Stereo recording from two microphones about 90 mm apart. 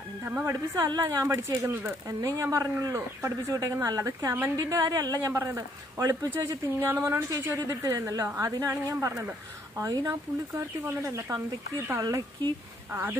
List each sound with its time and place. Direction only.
0.2 s a woman's voice: 25° right (ahead or behind)
0.7 s speech: 40° right (ahead or behind)
1.6 s speech: 20° right (ahead or behind)
2.0 s speech: 40° right (ahead or behind)
12.9 s speech: 25° right (ahead or behind)